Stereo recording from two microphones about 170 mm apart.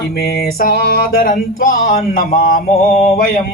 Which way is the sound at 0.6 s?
60° left (ahead or behind).